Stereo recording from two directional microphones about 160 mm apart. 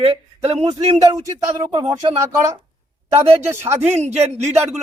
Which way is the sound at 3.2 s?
40° right (ahead or behind).